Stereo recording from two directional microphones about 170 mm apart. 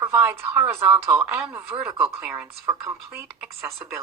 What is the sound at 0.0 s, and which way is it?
Speech, 15° right (ahead or behind).